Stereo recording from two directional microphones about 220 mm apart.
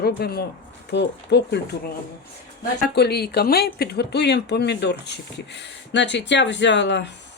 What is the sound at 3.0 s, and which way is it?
Speech, 45° left (ahead or behind).